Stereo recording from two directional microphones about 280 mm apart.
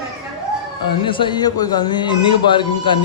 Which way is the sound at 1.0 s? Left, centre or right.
Centre.